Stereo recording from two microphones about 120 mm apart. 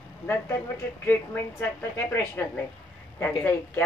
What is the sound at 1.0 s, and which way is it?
A woman's voice, 15° left (ahead or behind).